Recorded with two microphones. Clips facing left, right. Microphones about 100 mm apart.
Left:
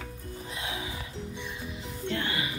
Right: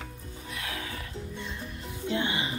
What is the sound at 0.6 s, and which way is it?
Music, 20° left (ahead or behind).